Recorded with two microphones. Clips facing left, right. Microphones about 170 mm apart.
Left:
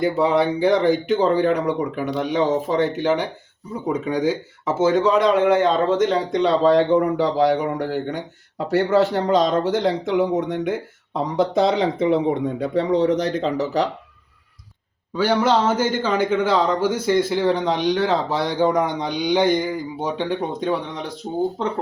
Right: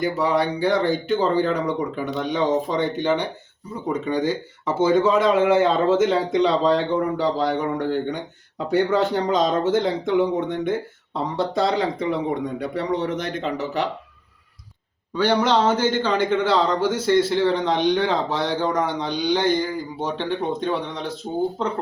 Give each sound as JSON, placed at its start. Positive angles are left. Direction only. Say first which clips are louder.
{"t": 0.0, "sound": "speech", "louder": "left 3 dB", "side_deg": 25}
{"t": 15.1, "sound": "speech", "louder": "left 1 dB", "side_deg": 5}